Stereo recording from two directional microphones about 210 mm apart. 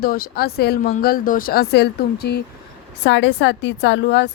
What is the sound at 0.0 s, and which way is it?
Speech, 45° left (ahead or behind).